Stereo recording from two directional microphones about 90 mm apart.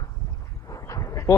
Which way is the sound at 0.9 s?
35° left (ahead or behind).